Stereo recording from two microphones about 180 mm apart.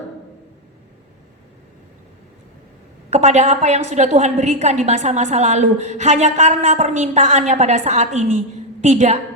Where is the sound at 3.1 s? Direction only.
40° right (ahead or behind).